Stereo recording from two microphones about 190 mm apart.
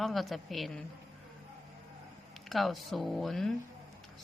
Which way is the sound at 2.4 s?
Centre (ahead or behind).